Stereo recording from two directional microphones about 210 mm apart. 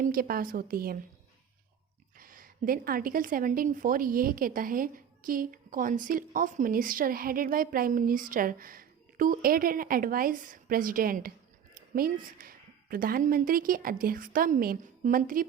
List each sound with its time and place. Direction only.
0.0 s a woman's voice: 45° right (ahead or behind)
2.1 s a woman's voice: 40° right (ahead or behind)